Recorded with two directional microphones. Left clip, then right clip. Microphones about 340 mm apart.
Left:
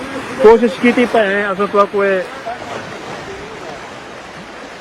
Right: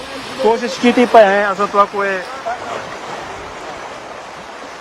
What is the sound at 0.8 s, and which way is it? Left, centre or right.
Speech, centre.